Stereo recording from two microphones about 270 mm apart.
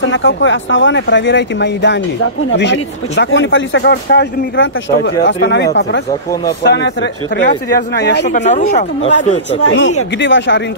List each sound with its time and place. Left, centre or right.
0.0 s speech: left
8.4 s speech: left
9.6 s speech: left